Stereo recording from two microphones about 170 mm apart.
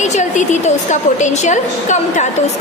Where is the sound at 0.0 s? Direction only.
45° left (ahead or behind).